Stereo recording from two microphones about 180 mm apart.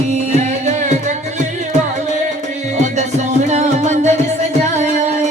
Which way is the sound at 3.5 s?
40° right (ahead or behind).